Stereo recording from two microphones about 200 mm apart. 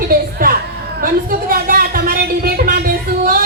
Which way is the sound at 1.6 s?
45° right (ahead or behind).